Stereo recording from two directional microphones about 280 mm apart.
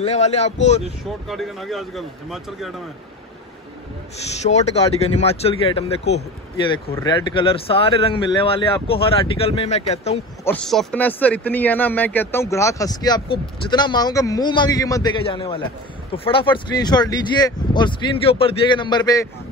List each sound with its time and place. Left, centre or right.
0.0 s speech: left
0.8 s speech: centre
4.4 s speech: left
10.4 s speech: centre